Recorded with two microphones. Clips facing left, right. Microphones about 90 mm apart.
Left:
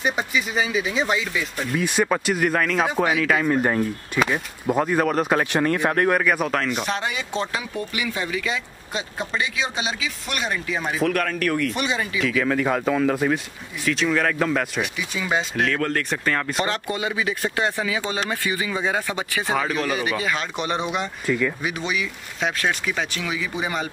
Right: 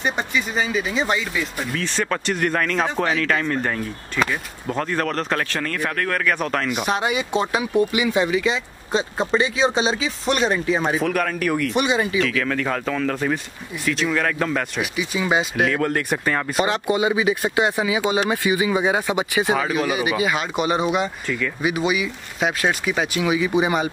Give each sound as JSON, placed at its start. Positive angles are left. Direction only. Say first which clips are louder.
{"t": 0.0, "sound": "speech", "louder": "even", "side_deg": 5}
{"t": 1.8, "sound": "speech", "louder": "left 4 dB", "side_deg": 10}
{"t": 6.1, "sound": "speech", "louder": "left 1 dB", "side_deg": 5}
{"t": 6.7, "sound": "speech", "louder": "right 4 dB", "side_deg": -15}
{"t": 11.0, "sound": "speech", "louder": "right 1 dB", "side_deg": -5}
{"t": 11.7, "sound": "speech", "louder": "right 5 dB", "side_deg": -20}
{"t": 12.2, "sound": "speech", "louder": "even", "side_deg": 5}
{"t": 16.6, "sound": "speech", "louder": "right 5 dB", "side_deg": -15}